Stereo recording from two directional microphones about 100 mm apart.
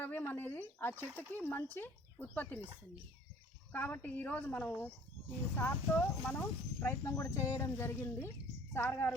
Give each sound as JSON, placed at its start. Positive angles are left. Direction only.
{"t": 0.0, "sound": "speech", "side_deg": 20}
{"t": 3.7, "sound": "a woman's voice", "side_deg": 20}